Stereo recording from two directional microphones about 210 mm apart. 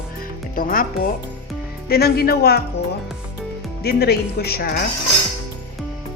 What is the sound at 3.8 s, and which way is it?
Speech, 50° left (ahead or behind).